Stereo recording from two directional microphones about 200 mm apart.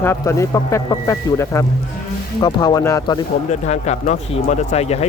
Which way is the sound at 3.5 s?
35° left (ahead or behind).